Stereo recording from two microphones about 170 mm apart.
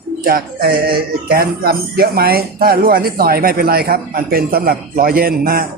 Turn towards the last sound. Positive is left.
turn(degrees=-60)  # may be behind; listen again after turning